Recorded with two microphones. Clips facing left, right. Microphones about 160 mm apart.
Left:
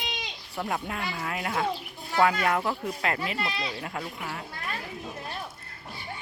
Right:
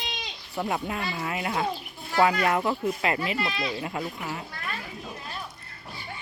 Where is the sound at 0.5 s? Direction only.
5° right (ahead or behind).